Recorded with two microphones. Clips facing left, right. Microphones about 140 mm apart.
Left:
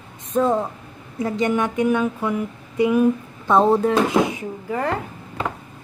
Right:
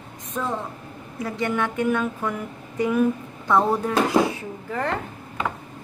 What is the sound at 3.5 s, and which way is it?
Speech, 25° left (ahead or behind).